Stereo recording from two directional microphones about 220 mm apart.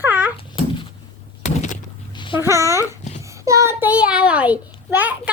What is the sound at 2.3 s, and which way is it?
Speech, 15° right (ahead or behind).